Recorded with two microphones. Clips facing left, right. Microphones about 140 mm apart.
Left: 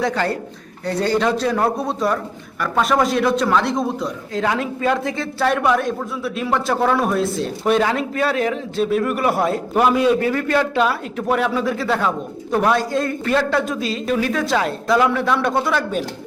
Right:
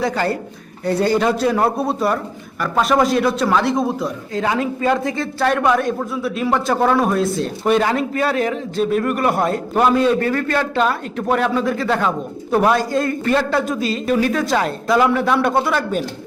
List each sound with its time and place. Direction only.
0.0 s speech: 5° right (ahead or behind)